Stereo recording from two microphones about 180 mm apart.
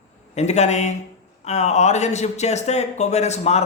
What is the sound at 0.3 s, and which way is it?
Speech, 40° left (ahead or behind).